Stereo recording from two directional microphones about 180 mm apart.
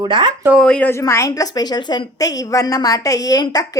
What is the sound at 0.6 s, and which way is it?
A woman's voice, 10° left (ahead or behind).